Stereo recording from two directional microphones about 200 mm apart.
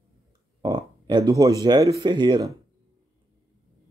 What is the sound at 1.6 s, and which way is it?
Speech, 20° right (ahead or behind).